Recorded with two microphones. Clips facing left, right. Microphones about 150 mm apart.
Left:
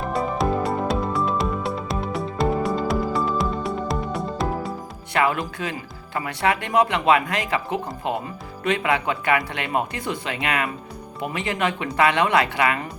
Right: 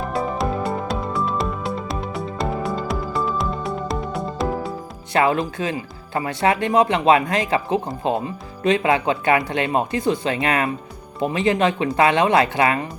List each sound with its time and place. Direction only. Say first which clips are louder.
0.1 s music: left 2 dB; centre (ahead or behind)
5.1 s speech: right 3 dB; 30° right (ahead or behind)